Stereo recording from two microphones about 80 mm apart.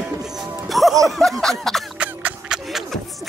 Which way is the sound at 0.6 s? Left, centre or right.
Centre.